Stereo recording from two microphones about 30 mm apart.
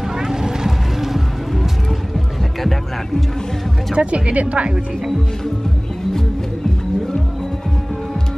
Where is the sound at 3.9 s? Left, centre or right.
Right.